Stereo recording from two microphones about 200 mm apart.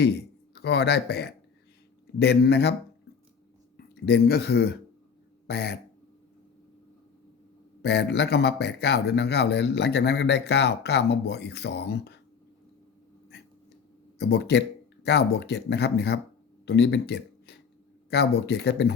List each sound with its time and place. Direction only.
0.0 s speech: 55° left (ahead or behind)
3.8 s speech: 55° left (ahead or behind)
7.8 s speech: 55° left (ahead or behind)
14.2 s speech: 55° left (ahead or behind)